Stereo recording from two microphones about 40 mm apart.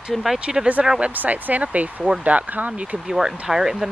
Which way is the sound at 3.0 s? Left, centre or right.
Centre.